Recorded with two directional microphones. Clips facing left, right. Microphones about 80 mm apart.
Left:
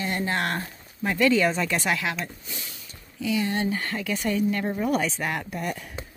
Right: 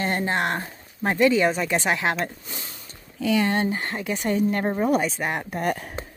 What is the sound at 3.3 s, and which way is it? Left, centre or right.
Speech, right.